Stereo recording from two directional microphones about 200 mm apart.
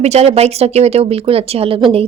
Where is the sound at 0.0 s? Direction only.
35° right (ahead or behind).